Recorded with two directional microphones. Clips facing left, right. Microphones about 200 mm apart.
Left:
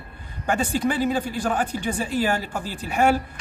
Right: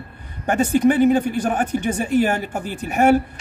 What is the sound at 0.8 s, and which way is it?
A man's voice, 50° right (ahead or behind).